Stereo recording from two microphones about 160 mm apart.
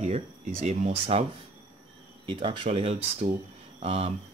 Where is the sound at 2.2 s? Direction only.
30° right (ahead or behind).